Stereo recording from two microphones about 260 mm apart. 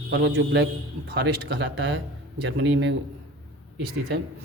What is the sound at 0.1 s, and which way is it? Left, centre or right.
A man's voice, right.